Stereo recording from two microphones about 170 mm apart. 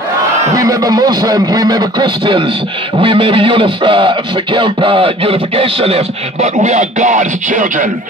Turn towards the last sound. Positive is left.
turn(degrees=-50)  # may be behind; listen again after turning